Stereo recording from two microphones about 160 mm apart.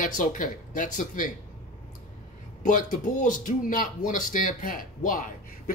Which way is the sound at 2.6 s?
55° left (ahead or behind).